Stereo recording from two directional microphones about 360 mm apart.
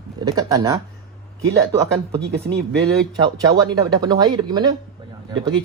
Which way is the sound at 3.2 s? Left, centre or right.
Centre.